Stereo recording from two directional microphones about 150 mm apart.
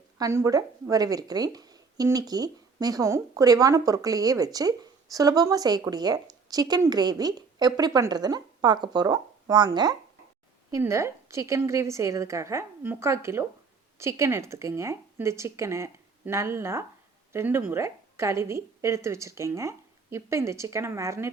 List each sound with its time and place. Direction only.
0.2 s a woman's voice: 20° right (ahead or behind)